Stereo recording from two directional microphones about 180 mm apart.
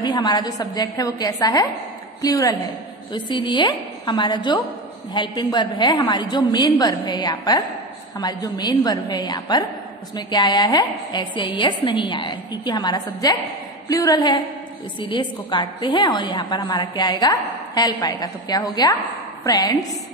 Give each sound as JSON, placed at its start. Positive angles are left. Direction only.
{"t": 0.0, "sound": "a woman's voice", "side_deg": 25}